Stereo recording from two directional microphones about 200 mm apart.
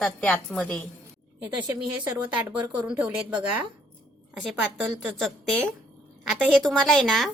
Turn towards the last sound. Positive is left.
turn(degrees=0)  # may be behind; listen again after turning